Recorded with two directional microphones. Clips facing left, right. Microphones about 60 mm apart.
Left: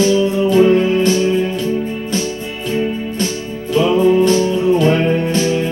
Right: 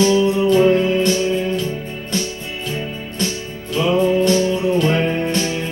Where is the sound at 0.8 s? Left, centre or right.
Centre.